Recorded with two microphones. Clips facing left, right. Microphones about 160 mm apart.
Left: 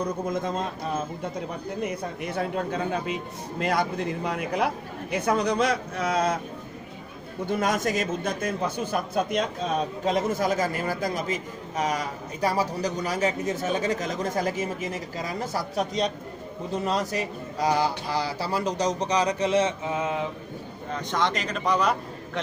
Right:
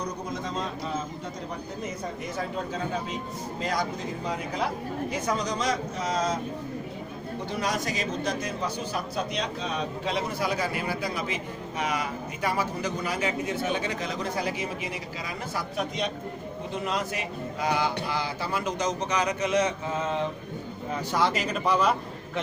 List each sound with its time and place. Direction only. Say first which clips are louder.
0.3 s a man's voice: left 4 dB; 55° left (ahead or behind)
1.8 s a man's voice: left 5 dB; 60° left (ahead or behind)
7.4 s a man's voice: left 5 dB; 50° left (ahead or behind); by 19.7 s 30° left (ahead or behind)
19.9 s mantra: left 1 dB; 10° left (ahead or behind)
20.9 s a man's voice: even; 5° right (ahead or behind)